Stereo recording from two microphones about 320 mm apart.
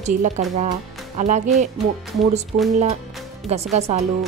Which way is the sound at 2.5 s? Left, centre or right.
Right.